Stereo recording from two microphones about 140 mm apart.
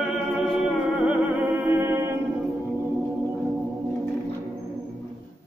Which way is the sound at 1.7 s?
15° right (ahead or behind).